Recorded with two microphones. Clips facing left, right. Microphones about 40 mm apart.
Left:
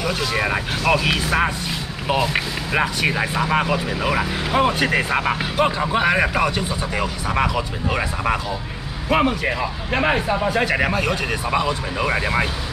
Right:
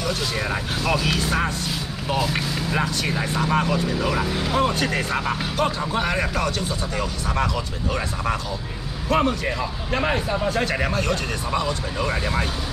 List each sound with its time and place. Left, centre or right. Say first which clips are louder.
0.0 s speech: left 4 dB; centre